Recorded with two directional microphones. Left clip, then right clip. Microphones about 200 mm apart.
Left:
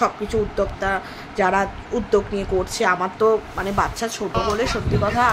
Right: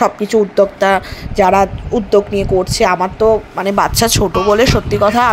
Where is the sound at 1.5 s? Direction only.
30° right (ahead or behind).